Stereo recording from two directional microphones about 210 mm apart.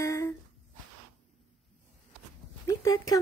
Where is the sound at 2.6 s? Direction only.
15° left (ahead or behind).